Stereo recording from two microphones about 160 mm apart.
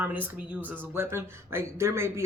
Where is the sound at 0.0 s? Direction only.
10° right (ahead or behind).